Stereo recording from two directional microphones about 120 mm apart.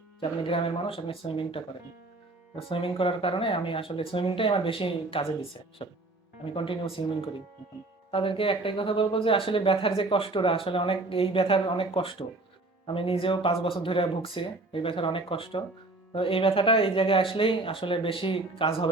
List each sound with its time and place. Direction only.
0.2 s speech: 50° left (ahead or behind)